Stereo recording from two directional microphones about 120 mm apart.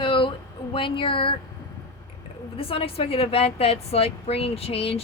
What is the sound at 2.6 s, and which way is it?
A woman's voice, 50° left (ahead or behind).